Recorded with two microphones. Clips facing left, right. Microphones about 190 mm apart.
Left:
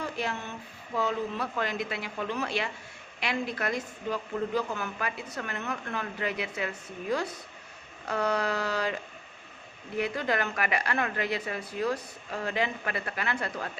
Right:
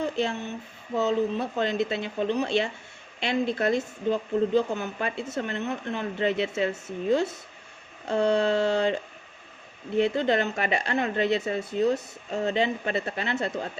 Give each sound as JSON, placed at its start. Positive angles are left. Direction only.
{"t": 0.0, "sound": "a woman's voice", "side_deg": -25}
{"t": 10.0, "sound": "speech", "side_deg": -25}